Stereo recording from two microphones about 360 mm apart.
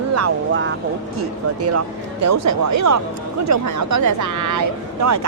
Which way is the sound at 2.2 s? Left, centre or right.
Right.